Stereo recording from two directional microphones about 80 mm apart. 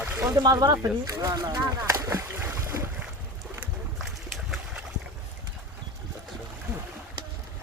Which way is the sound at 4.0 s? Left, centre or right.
Centre.